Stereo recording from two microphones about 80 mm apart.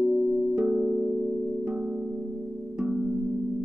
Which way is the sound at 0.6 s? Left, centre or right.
Centre.